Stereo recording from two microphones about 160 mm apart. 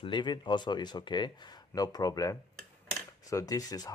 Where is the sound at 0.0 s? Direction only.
30° left (ahead or behind).